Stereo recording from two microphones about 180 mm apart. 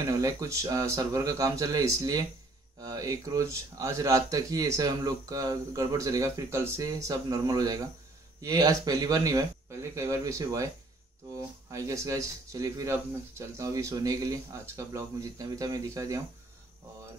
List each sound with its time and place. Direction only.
0.0 s speech: 20° right (ahead or behind)